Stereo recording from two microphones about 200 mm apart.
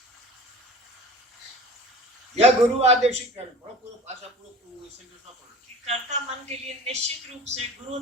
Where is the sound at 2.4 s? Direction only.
30° right (ahead or behind).